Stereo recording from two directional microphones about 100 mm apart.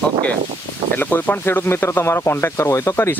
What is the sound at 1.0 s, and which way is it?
Speech, 20° left (ahead or behind).